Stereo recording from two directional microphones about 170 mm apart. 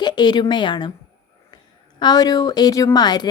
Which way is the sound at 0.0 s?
25° left (ahead or behind).